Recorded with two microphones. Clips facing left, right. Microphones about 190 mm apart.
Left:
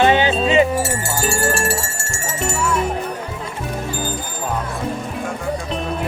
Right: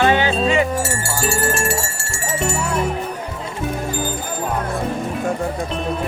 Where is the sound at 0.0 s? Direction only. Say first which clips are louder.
Left 2 dB; 20° left (ahead or behind).